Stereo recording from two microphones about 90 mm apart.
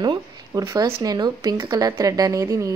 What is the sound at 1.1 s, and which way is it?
A woman's voice, 50° right (ahead or behind).